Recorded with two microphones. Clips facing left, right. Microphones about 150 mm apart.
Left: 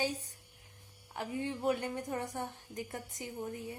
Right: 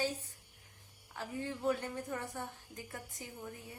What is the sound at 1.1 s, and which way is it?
A woman's voice, 20° left (ahead or behind).